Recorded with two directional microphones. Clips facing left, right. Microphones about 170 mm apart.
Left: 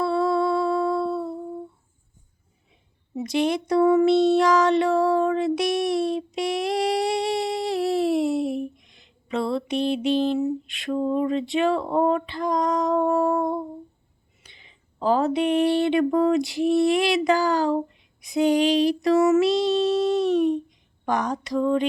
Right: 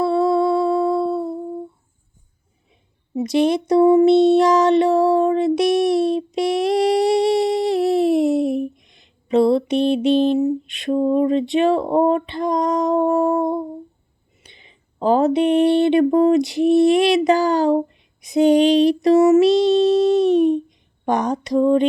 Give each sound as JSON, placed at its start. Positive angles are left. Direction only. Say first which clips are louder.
{"t": 0.0, "sound": "humming", "louder": "right 5 dB", "side_deg": -20}
{"t": 3.2, "sound": "speech", "louder": "right 6 dB", "side_deg": -20}
{"t": 9.3, "sound": "a sound", "louder": "right 9 dB", "side_deg": -20}